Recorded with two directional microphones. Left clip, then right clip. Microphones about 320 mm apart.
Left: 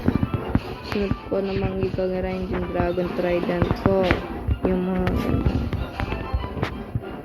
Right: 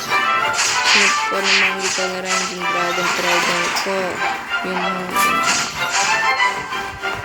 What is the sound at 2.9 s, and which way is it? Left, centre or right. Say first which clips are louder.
Speech: right 6 dB; right.